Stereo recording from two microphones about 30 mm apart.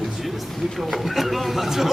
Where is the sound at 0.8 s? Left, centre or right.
Centre.